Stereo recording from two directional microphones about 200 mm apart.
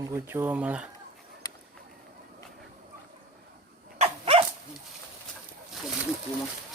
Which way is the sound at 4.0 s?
30° right (ahead or behind).